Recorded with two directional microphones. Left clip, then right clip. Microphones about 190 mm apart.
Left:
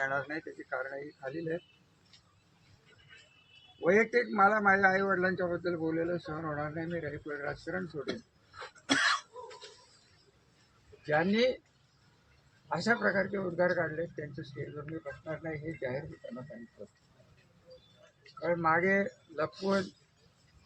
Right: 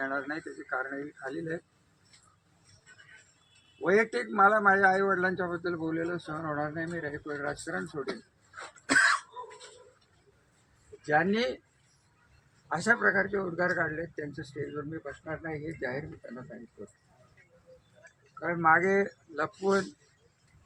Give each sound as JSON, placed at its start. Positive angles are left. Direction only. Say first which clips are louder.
{"t": 0.0, "sound": "a man's voice", "louder": "even", "side_deg": -5}
{"t": 3.8, "sound": "a man's voice", "louder": "even", "side_deg": -5}
{"t": 11.0, "sound": "a man's voice", "louder": "right 1 dB", "side_deg": -5}
{"t": 12.6, "sound": "a man's voice", "louder": "right 4 dB", "side_deg": -5}
{"t": 18.3, "sound": "a man's voice", "louder": "right 4 dB", "side_deg": 0}